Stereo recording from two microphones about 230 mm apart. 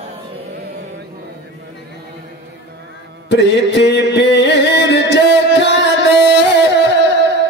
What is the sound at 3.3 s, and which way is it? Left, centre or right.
Music, left.